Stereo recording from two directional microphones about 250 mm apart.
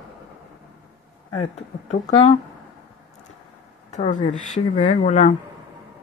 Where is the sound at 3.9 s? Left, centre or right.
Left.